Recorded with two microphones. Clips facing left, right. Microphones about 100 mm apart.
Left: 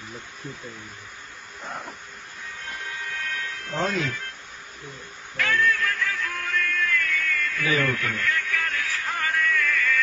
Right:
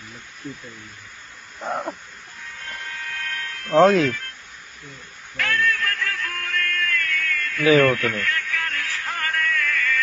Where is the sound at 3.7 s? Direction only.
85° right.